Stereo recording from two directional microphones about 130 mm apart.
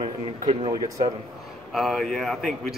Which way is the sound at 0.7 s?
35° right (ahead or behind).